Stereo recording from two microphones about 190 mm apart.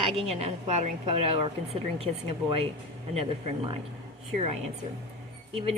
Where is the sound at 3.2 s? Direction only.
30° right (ahead or behind).